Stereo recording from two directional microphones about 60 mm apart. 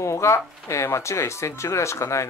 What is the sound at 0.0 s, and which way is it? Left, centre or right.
Speech, left.